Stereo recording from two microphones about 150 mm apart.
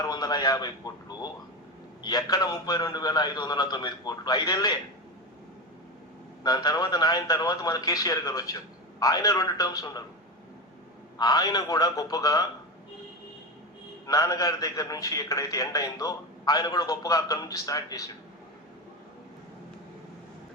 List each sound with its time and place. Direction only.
0.0 s radio: 25° left (ahead or behind)
2.0 s a man's voice: 25° left (ahead or behind)
6.4 s a man's voice: 25° left (ahead or behind)
11.2 s a man's voice: 25° left (ahead or behind)
14.1 s a man's voice: 20° left (ahead or behind)